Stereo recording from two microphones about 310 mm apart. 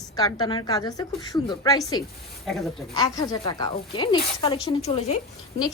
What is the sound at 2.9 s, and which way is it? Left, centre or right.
Speech, centre.